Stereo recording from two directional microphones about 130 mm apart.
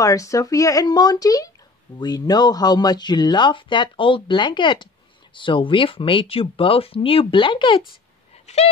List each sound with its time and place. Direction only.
0.0 s speech: 25° left (ahead or behind)